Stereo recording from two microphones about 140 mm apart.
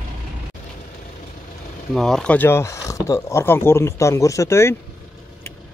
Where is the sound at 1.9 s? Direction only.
5° left (ahead or behind); by 4.8 s 20° left (ahead or behind).